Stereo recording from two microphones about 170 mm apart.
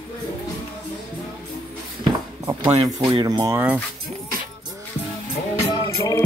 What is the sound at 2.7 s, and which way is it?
Speech, 25° right (ahead or behind).